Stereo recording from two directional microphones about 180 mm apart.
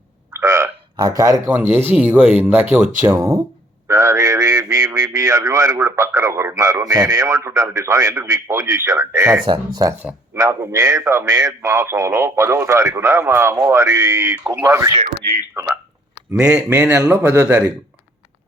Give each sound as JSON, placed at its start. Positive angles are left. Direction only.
{"t": 0.3, "sound": "frog", "side_deg": -15}
{"t": 1.7, "sound": "speech", "side_deg": -10}
{"t": 10.0, "sound": "speech", "side_deg": -10}
{"t": 16.3, "sound": "speech", "side_deg": -5}